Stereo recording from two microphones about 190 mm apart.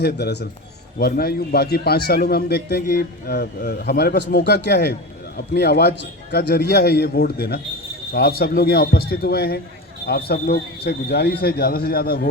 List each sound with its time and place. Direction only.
0.0 s a man's voice: 60° left (ahead or behind)